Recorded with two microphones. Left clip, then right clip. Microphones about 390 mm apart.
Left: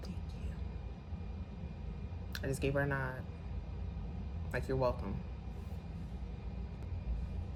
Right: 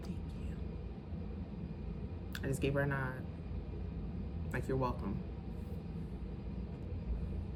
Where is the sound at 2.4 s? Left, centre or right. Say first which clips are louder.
Left 1 dB; centre.